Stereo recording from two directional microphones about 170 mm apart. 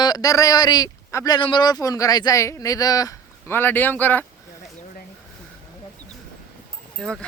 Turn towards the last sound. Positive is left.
turn(degrees=5)  # may be behind; listen again after turning